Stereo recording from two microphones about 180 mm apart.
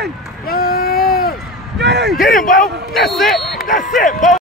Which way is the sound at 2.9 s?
Centre (ahead or behind).